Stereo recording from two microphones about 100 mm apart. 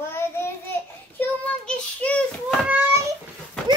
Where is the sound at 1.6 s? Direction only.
10° left (ahead or behind).